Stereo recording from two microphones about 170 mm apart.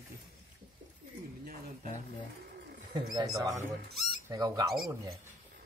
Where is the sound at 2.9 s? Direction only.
25° right (ahead or behind).